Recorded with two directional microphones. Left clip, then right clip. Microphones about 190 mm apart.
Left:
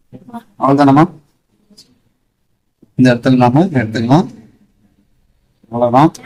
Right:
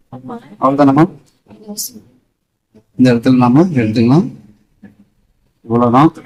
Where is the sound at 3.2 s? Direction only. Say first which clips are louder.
Even; 25° left (ahead or behind).